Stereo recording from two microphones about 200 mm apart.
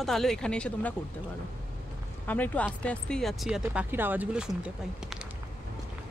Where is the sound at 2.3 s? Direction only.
5° left (ahead or behind).